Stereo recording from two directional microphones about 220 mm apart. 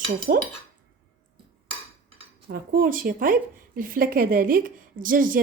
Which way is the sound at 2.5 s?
40° right (ahead or behind).